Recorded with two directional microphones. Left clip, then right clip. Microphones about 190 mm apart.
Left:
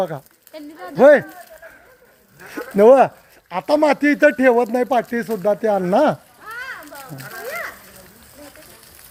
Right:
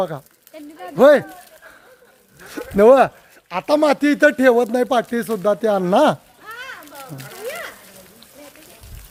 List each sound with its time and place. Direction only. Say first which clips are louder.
0.0 s speech: even; 15° right (ahead or behind)
0.5 s speech: left 2 dB; 50° left (ahead or behind)
0.9 s speech: left 1 dB; 10° right (ahead or behind)
2.5 s speech: even; 10° right (ahead or behind)